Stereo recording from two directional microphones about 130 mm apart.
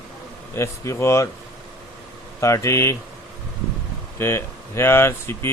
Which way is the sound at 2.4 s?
20° left (ahead or behind).